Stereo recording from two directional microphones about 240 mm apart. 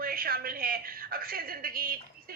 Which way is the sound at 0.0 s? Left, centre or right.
Right.